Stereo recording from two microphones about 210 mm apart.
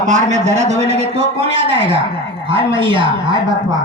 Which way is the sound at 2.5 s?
25° right (ahead or behind).